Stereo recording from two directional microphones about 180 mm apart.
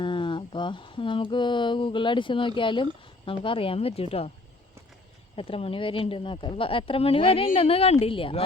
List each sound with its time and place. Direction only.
0.0 s mantra: 25° left (ahead or behind)
2.6 s speech: 25° left (ahead or behind)
5.4 s speech: 30° left (ahead or behind)